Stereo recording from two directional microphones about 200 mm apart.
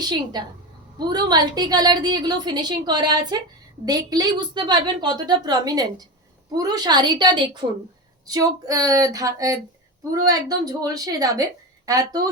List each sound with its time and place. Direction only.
0.0 s a woman's voice: 20° right (ahead or behind)